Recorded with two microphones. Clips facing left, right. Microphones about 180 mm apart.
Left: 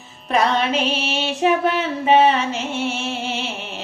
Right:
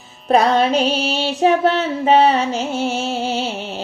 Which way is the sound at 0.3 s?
40° right (ahead or behind).